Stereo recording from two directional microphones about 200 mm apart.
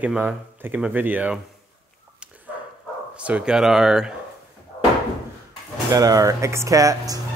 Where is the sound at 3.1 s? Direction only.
5° right (ahead or behind).